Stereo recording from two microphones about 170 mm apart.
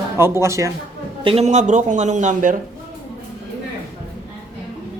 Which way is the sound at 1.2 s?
40° right (ahead or behind).